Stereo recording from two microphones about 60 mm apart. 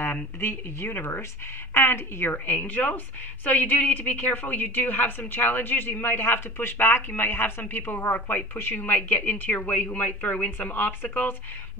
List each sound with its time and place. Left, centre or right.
0.0 s a woman's voice: left